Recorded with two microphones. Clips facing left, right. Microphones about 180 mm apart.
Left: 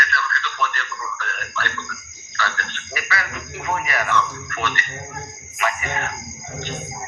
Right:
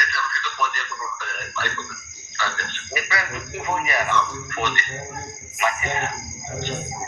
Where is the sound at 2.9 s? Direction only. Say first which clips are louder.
Even; 20° right (ahead or behind).